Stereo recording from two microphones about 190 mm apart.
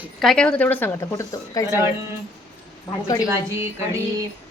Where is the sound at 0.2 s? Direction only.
5° left (ahead or behind).